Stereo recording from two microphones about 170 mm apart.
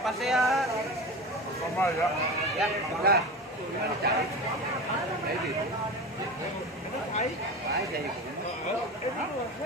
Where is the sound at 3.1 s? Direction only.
65° right (ahead or behind).